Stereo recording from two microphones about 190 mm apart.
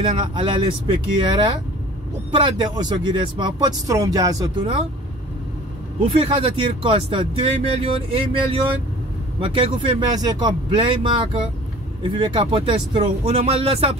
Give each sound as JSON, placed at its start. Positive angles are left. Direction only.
{"t": 0.0, "sound": "speech", "side_deg": -25}
{"t": 6.0, "sound": "speech", "side_deg": -25}